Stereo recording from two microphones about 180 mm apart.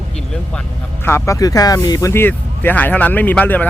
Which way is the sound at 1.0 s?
15° left (ahead or behind).